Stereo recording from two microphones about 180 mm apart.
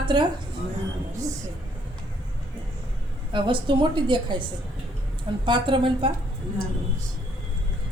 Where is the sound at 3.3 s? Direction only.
25° right (ahead or behind).